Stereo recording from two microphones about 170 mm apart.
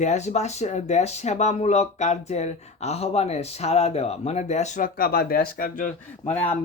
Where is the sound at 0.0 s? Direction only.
40° left (ahead or behind).